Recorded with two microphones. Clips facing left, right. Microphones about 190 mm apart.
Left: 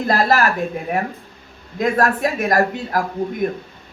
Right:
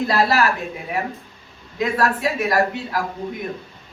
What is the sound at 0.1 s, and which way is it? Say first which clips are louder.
Speech: left 3 dB; 45° left (ahead or behind).